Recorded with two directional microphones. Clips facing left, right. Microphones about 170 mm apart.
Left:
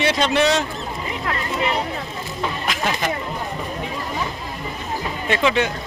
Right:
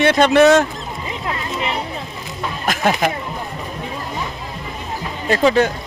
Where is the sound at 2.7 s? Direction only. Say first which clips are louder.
Right 8 dB; 50° right (ahead or behind).